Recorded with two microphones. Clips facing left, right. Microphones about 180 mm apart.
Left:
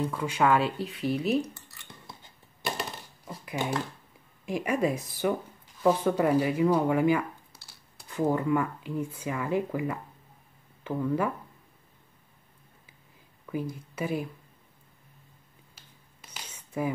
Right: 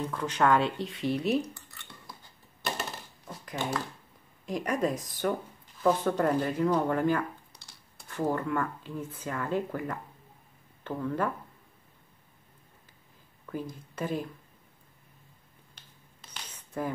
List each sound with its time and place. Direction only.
0.1 s speech: 10° left (ahead or behind)
1.8 s cutlery: 20° left (ahead or behind)
3.3 s a sound: 10° left (ahead or behind)
4.5 s speech: 10° left (ahead or behind)
13.5 s speech: 10° left (ahead or behind)
15.7 s finger snapping: 10° left (ahead or behind)